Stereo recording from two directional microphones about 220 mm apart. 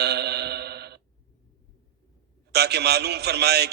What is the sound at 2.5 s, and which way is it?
A man's voice, 50° right (ahead or behind).